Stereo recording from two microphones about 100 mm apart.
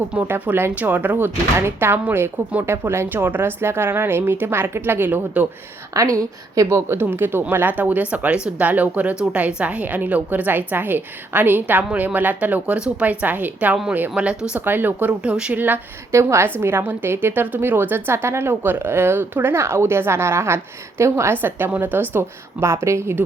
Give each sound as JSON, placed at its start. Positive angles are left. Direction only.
{"t": 0.1, "sound": "speech", "side_deg": -15}
{"t": 5.9, "sound": "a woman's voice", "side_deg": -35}